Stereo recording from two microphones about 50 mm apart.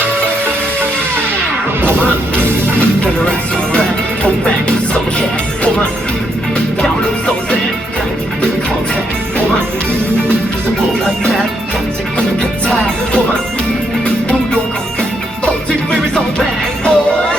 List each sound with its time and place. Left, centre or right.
1.8 s music: right
3.2 s music: left
15.9 s music: centre